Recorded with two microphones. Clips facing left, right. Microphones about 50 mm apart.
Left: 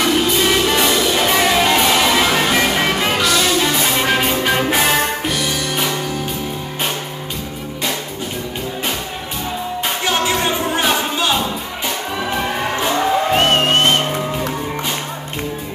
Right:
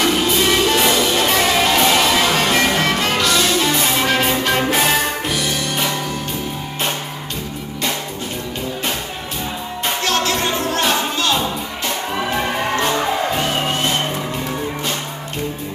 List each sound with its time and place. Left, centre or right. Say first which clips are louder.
0.0 s music: left 1 dB; centre
10.0 s music: left 2 dB; centre
12.2 s music: even; centre
13.3 s music: left 5 dB; left